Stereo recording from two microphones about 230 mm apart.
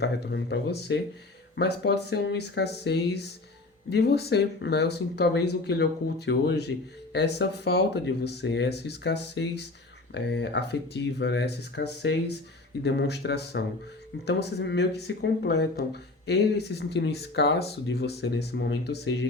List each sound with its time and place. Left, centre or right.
0.0 s speech: left